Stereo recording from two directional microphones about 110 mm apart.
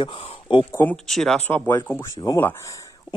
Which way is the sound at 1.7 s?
20° left (ahead or behind).